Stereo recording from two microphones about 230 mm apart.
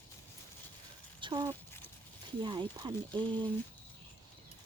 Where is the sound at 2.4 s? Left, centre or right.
Right.